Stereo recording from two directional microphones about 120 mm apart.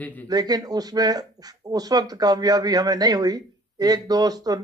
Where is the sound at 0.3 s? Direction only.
35° right (ahead or behind).